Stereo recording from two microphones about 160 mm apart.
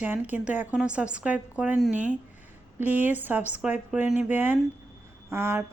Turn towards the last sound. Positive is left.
turn(degrees=-15)  # may be behind; listen again after turning